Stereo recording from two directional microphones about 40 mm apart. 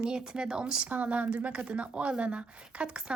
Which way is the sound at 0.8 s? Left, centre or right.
Right.